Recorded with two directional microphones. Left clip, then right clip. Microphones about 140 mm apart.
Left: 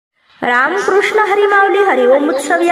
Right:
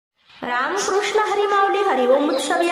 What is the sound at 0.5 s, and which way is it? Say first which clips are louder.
A woman's voice: left 8 dB; 40° left (ahead or behind).